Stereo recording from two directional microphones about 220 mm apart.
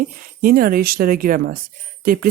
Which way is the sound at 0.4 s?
40° right (ahead or behind).